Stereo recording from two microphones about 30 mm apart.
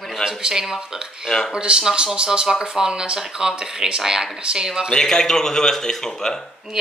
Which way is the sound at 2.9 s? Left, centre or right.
Right.